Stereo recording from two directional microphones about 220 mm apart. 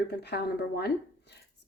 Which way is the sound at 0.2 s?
50° left (ahead or behind).